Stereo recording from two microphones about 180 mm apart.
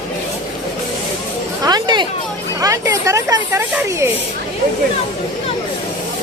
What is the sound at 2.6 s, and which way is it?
Speech, 15° right (ahead or behind).